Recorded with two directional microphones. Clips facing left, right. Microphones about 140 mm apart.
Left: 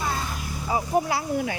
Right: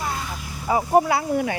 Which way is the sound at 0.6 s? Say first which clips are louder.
Right 6 dB; 65° right (ahead or behind).